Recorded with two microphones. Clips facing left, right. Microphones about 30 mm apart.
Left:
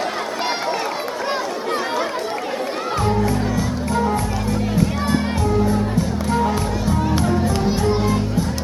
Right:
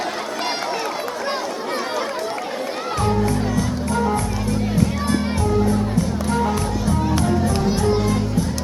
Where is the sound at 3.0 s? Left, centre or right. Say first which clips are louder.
Even; centre.